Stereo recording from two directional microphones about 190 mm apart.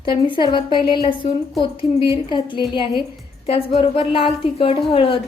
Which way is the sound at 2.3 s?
25° left (ahead or behind).